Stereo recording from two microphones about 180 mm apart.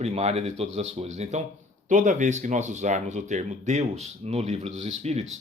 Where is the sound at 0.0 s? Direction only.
35° right (ahead or behind).